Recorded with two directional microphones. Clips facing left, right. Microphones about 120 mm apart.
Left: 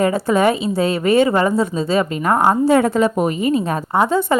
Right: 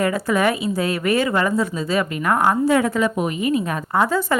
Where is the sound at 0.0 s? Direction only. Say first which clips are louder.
Left 4 dB; 25° left (ahead or behind).